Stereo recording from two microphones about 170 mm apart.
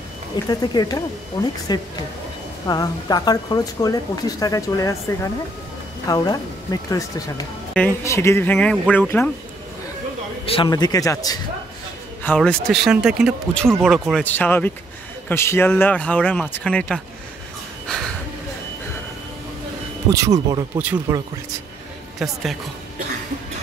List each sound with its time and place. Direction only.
0.5 s speech: 20° left (ahead or behind)
10.4 s a man's voice: 35° left (ahead or behind)
10.7 s speech: 20° left (ahead or behind)
12.2 s speech: 10° left (ahead or behind)
14.2 s speech: 10° left (ahead or behind)
20.1 s speech: 20° right (ahead or behind)
22.2 s speech: centre (ahead or behind)